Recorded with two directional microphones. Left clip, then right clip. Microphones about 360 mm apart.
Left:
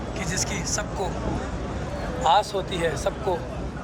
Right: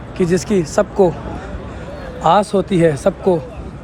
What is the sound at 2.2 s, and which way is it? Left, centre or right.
Speech, centre.